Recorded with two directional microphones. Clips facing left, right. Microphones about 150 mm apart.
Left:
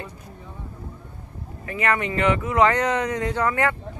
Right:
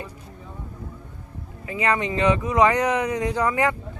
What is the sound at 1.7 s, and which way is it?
Speech, 15° right (ahead or behind).